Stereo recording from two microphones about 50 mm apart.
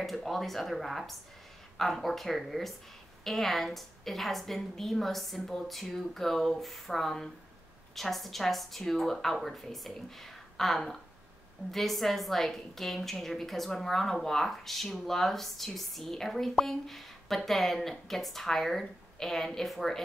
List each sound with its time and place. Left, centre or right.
0.0 s a woman's voice: centre